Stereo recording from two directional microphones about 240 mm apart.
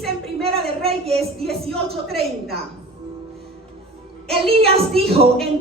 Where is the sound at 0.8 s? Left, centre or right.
Right.